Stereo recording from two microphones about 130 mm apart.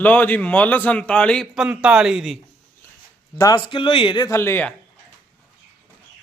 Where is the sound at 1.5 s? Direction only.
5° right (ahead or behind).